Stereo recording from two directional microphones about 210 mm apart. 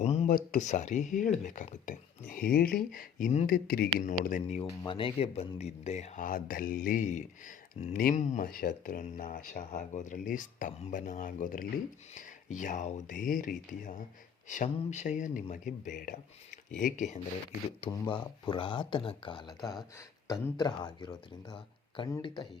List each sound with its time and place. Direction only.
0.0 s a sound: 30° left (ahead or behind)
0.3 s speech: 35° left (ahead or behind)
4.7 s speech: 20° left (ahead or behind); by 17.2 s 35° left (ahead or behind)
17.7 s speech: 25° left (ahead or behind)